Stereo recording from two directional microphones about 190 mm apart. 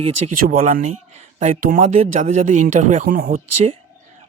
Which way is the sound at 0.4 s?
45° right (ahead or behind).